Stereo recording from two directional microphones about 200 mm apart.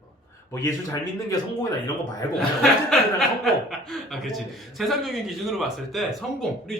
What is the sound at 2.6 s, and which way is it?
Speech, centre (ahead or behind).